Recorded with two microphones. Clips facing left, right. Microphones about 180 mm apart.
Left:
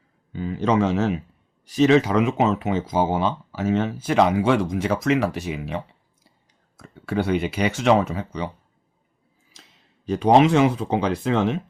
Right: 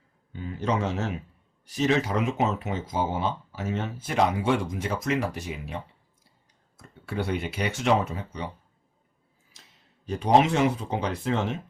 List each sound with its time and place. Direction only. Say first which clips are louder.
0.3 s speech: left 7 dB; 90° left
10.1 s speech: left 5 dB; 90° left